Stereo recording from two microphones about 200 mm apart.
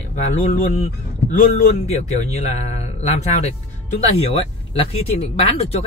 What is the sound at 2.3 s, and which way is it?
Speech, 35° left (ahead or behind).